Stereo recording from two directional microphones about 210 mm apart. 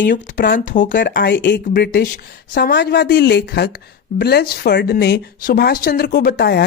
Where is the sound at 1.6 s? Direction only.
40° left (ahead or behind).